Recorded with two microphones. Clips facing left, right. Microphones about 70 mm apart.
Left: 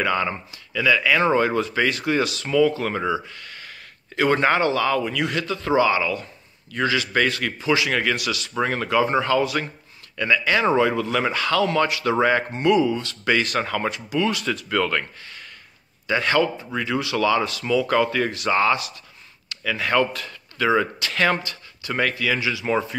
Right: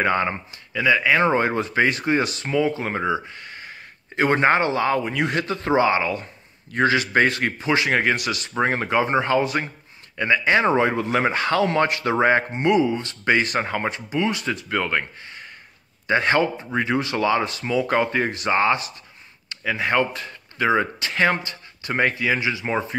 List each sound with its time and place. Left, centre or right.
0.0 s speech: right